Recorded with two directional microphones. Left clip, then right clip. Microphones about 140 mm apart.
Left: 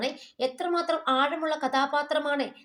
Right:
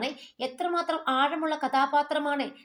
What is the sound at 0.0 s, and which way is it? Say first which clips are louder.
Speech: left 3 dB; 35° left (ahead or behind).